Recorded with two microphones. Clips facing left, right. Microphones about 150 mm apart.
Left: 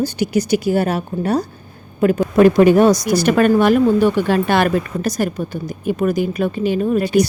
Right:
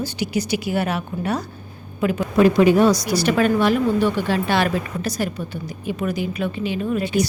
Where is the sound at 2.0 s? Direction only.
50° left (ahead or behind).